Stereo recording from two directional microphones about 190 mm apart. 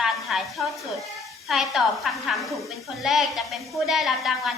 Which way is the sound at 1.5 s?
Centre (ahead or behind).